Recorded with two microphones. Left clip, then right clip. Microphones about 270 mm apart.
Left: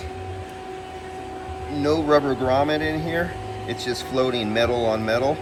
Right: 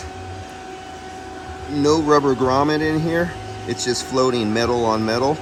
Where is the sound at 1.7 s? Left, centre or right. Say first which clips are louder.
Right 3 dB; centre.